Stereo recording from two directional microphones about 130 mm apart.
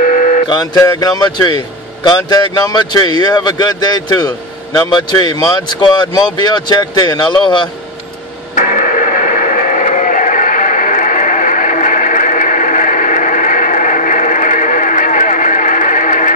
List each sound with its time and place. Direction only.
0.0 s a sound: 80° left
0.5 s speech: 30° left (ahead or behind)
5.7 s speech: 35° left (ahead or behind)
8.5 s radio: 85° left